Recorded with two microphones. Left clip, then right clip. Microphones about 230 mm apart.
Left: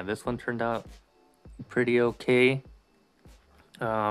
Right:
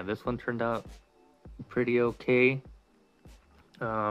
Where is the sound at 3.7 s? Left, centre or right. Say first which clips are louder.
Left 3 dB; centre.